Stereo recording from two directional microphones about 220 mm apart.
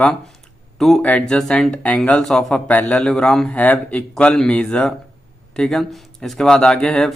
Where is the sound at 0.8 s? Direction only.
Centre (ahead or behind).